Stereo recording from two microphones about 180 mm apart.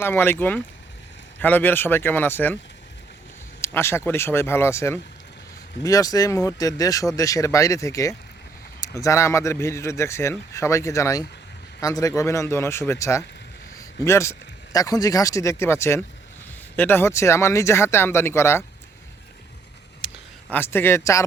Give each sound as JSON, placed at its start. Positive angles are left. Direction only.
{"t": 0.0, "sound": "a man's voice", "side_deg": 10}
{"t": 3.6, "sound": "a man's voice", "side_deg": 15}
{"t": 20.5, "sound": "a man's voice", "side_deg": 10}